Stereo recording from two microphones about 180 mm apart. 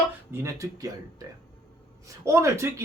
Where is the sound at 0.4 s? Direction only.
15° right (ahead or behind).